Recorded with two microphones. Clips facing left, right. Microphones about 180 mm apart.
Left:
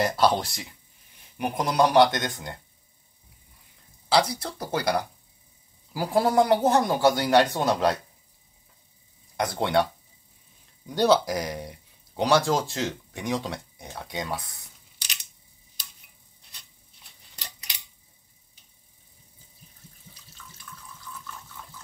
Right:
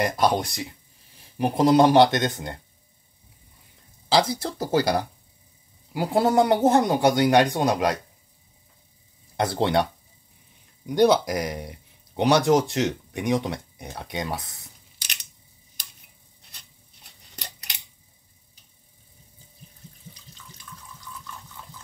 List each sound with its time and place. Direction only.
0.0 s speech: 15° right (ahead or behind)
4.1 s speech: 25° right (ahead or behind)
9.4 s speech: 25° right (ahead or behind)
10.9 s speech: 15° right (ahead or behind)